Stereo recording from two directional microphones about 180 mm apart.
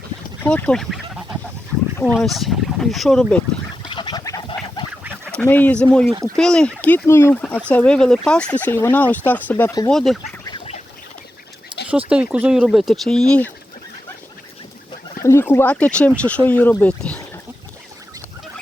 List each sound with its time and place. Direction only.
0.4 s speech: 5° left (ahead or behind)
3.8 s duck: 25° left (ahead or behind)
5.3 s speech: 10° left (ahead or behind)
11.9 s speech: 5° right (ahead or behind)
15.2 s speech: 15° left (ahead or behind)